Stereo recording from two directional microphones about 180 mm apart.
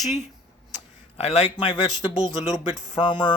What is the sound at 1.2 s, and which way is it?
A man's voice, 35° left (ahead or behind).